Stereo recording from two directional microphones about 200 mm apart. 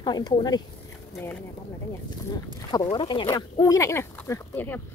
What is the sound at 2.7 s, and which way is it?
A woman's voice, 20° left (ahead or behind).